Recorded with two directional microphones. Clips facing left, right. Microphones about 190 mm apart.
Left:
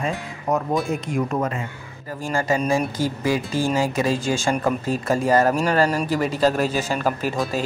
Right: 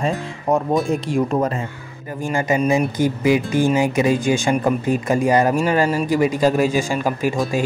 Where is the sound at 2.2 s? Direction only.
20° right (ahead or behind).